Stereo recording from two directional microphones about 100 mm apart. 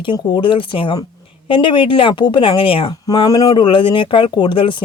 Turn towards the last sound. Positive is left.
turn(degrees=55)  # may be behind; listen again after turning